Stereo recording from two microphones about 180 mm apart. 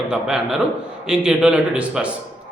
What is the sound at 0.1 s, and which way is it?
A man's voice, 5° right (ahead or behind).